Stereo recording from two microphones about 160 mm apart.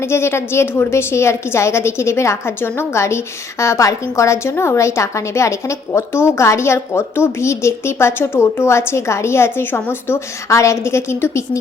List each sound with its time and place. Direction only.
0.1 s a woman's voice: 15° left (ahead or behind)